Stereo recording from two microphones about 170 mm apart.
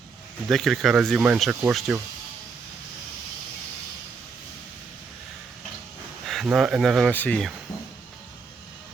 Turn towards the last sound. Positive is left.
turn(degrees=5)  # may be behind; listen again after turning